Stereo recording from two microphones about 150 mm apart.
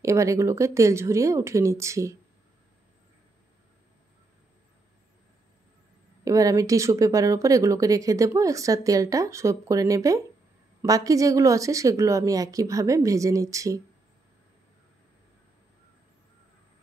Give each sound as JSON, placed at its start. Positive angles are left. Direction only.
{"t": 0.0, "sound": "speech", "side_deg": -20}
{"t": 6.2, "sound": "speech", "side_deg": -20}